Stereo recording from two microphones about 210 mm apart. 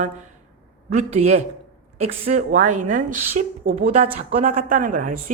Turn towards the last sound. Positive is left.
turn(degrees=-40)  # may be behind; listen again after turning